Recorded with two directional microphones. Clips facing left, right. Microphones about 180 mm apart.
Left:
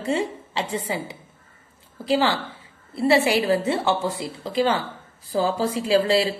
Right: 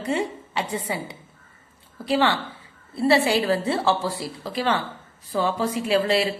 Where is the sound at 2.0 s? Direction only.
25° left (ahead or behind).